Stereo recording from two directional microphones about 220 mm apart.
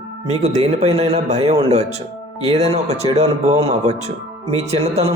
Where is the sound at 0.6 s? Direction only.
30° right (ahead or behind).